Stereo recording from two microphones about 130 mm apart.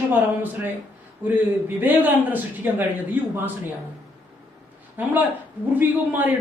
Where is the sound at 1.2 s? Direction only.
15° right (ahead or behind).